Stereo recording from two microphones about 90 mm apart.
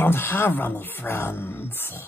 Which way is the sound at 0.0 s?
25° left (ahead or behind).